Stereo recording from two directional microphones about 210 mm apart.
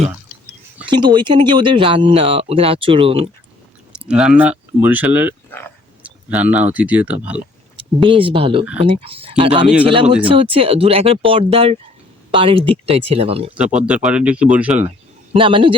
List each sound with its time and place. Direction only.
0.9 s speech: 20° right (ahead or behind)
3.9 s speech: 5° right (ahead or behind)
5.5 s speech: 10° left (ahead or behind)
6.0 s a sound: 5° right (ahead or behind)
6.7 s speech: 5° right (ahead or behind)
7.8 s speech: 25° right (ahead or behind)
13.6 s speech: 5° right (ahead or behind)
14.8 s a man's voice: 25° right (ahead or behind)